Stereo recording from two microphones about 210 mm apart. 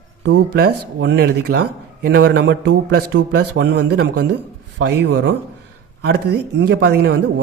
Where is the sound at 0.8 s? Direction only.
60° right (ahead or behind).